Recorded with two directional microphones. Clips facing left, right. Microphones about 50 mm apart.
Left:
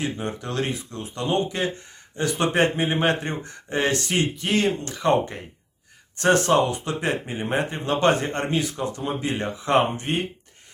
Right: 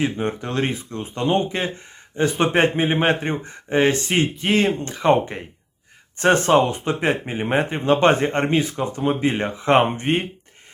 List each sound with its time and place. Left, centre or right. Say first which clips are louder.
0.0 s speech: right 5 dB; right